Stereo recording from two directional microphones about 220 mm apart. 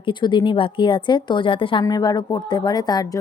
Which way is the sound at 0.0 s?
20° left (ahead or behind).